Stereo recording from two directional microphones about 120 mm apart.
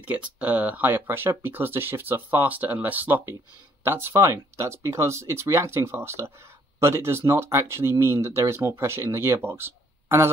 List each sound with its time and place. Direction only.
0.0 s speech: 10° right (ahead or behind)